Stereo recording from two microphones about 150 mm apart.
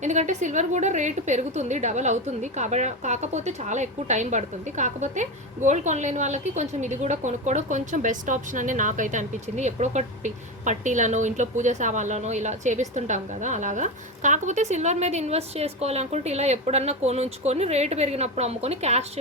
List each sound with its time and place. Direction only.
0.0 s a woman's voice: 50° right (ahead or behind)